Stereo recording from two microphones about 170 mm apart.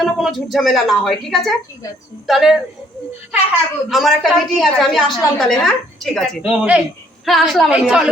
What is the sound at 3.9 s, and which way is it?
A woman's voice, centre (ahead or behind).